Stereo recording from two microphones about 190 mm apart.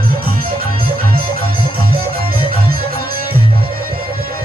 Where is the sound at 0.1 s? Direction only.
50° right (ahead or behind).